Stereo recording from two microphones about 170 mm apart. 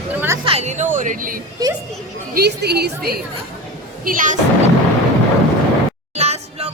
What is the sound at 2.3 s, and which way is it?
Speech, 70° right (ahead or behind).